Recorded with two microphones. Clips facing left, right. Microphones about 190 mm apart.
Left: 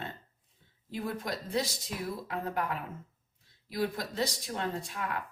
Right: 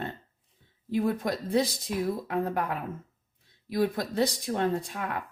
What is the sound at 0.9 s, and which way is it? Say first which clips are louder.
Speech: right 8 dB; 55° right (ahead or behind).